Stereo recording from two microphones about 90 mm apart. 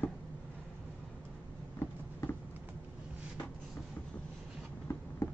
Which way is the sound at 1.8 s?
25° left (ahead or behind).